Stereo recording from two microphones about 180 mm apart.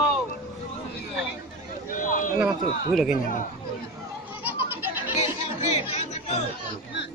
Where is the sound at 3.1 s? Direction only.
45° left (ahead or behind).